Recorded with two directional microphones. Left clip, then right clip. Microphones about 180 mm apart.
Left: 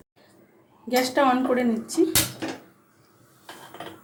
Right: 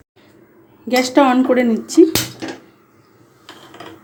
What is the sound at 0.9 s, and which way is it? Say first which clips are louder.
A woman's voice: right 7 dB; 45° right (ahead or behind).